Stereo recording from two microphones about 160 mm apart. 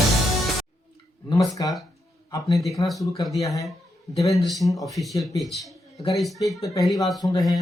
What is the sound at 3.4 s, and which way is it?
Speech, 20° left (ahead or behind).